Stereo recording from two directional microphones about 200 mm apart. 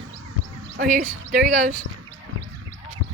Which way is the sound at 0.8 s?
45° right (ahead or behind).